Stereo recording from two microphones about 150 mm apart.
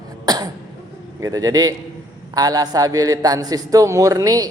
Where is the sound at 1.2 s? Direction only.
25° right (ahead or behind).